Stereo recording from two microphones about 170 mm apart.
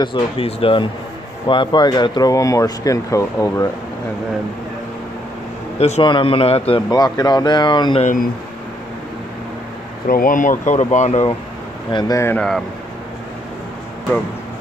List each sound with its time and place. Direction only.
0.0 s speech: 30° left (ahead or behind)
5.8 s speech: 40° left (ahead or behind)
6.9 s speech: 25° left (ahead or behind)
8.0 s speech: 50° left (ahead or behind)
10.0 s speech: 55° left (ahead or behind)
11.9 s speech: 25° left (ahead or behind)
12.4 s speech: centre (ahead or behind)